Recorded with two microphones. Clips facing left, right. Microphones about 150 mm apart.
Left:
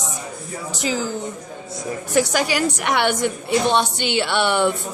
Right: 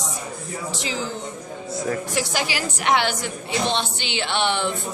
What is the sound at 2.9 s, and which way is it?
A woman's voice, 60° left (ahead or behind).